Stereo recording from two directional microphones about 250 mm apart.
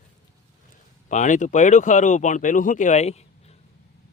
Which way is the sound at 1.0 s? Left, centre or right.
Left.